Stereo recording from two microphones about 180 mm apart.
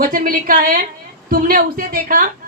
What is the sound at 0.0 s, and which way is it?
A woman's voice, 50° right (ahead or behind).